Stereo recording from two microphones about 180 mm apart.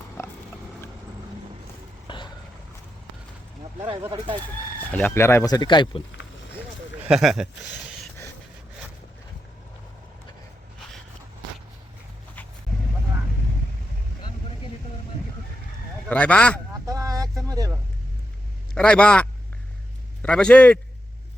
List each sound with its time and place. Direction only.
0.2 s pig: 15° left (ahead or behind)
2.0 s vehicle: 25° left (ahead or behind)
4.8 s speech: 10° left (ahead or behind); by 6.0 s 25° left (ahead or behind)
7.1 s a man's voice: centre (ahead or behind)
16.0 s speech: 5° left (ahead or behind)
16.8 s vehicle: 20° right (ahead or behind)
18.7 s a man's voice: 5° left (ahead or behind)